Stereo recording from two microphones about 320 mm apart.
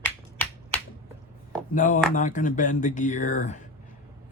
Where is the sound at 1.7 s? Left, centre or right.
Left.